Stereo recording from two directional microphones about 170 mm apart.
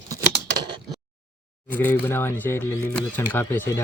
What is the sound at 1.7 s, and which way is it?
Speech, 10° left (ahead or behind).